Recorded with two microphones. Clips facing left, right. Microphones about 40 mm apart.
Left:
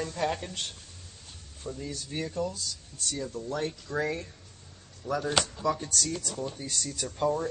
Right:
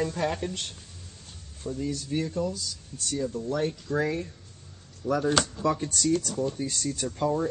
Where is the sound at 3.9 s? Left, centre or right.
Centre.